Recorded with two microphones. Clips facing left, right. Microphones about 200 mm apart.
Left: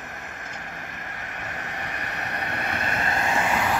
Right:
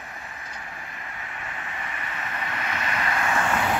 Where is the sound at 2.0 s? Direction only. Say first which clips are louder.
Left 1 dB; 65° left (ahead or behind).